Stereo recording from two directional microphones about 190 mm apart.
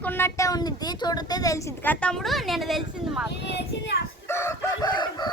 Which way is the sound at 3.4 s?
60° left (ahead or behind).